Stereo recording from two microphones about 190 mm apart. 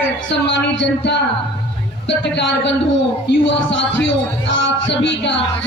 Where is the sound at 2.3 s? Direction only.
70° left (ahead or behind).